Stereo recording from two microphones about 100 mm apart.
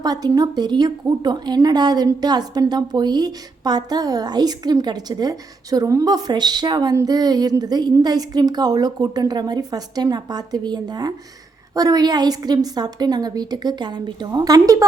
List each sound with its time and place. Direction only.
0.0 s a woman's voice: 40° right (ahead or behind)
7.0 s a sound: 40° right (ahead or behind)
7.6 s a woman's voice: 45° right (ahead or behind)